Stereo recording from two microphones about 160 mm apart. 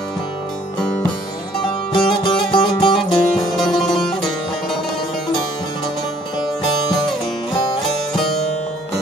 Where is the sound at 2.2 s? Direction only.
30° left (ahead or behind).